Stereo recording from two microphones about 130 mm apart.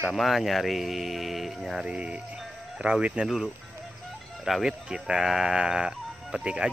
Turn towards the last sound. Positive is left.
turn(degrees=-5)  # may be behind; listen again after turning